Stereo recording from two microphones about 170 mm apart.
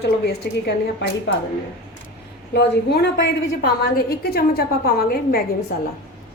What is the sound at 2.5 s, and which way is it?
Speech, 75° left (ahead or behind).